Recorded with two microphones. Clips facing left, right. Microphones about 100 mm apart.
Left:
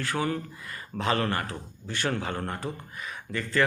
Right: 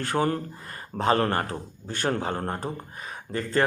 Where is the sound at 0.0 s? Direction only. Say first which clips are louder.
Right 4 dB; 50° right (ahead or behind).